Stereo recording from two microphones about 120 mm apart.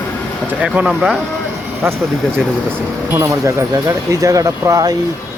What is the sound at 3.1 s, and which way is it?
Speech, 25° right (ahead or behind).